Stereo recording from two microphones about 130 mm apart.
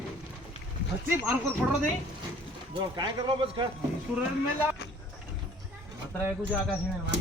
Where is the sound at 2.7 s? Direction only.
35° right (ahead or behind).